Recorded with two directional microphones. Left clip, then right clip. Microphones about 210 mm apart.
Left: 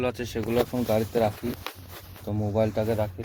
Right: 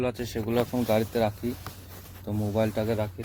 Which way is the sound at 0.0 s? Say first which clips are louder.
Left 1 dB; centre (ahead or behind).